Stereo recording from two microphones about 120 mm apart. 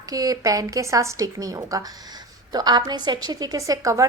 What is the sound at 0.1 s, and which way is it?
A woman's voice, 30° right (ahead or behind).